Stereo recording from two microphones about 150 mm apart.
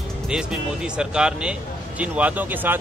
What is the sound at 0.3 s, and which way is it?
Speech, 5° right (ahead or behind).